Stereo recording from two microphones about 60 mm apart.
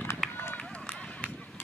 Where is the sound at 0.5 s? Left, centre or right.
Left.